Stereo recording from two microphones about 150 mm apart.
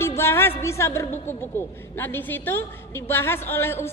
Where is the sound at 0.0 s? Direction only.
15° left (ahead or behind).